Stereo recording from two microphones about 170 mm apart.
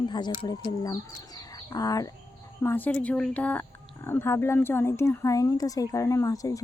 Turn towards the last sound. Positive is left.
turn(degrees=20)  # may be behind; listen again after turning